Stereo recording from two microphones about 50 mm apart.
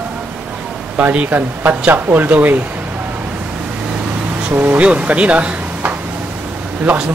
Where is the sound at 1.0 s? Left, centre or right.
Right.